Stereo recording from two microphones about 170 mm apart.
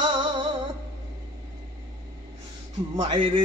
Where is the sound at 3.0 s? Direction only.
30° right (ahead or behind).